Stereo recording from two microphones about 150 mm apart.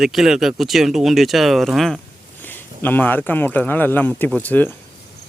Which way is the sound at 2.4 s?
15° left (ahead or behind).